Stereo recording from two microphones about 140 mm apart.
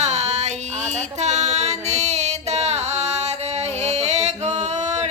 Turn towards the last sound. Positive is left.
turn(degrees=-55)  # may be behind; listen again after turning